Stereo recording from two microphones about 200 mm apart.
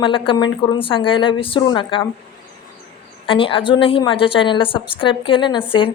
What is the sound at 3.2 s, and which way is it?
A woman's voice, 25° left (ahead or behind).